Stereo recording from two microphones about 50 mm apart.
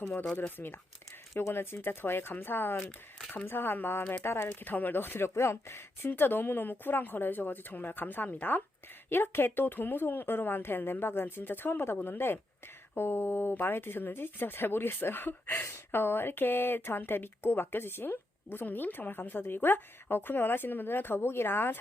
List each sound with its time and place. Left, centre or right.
0.3 s speech: left
1.3 s speech: left
4.6 s speech: left
9.0 s speech: left